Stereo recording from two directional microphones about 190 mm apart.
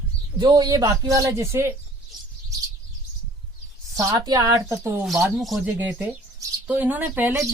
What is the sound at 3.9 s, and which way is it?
Speech, 20° right (ahead or behind).